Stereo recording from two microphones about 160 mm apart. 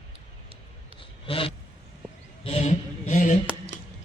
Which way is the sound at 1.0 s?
35° left (ahead or behind).